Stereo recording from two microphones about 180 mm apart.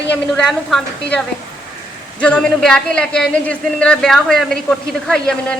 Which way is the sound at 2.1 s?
5° left (ahead or behind).